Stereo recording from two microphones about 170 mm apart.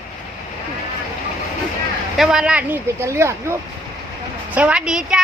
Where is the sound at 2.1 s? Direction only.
5° right (ahead or behind).